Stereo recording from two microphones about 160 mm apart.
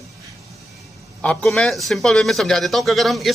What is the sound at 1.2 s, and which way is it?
Speech, 5° left (ahead or behind).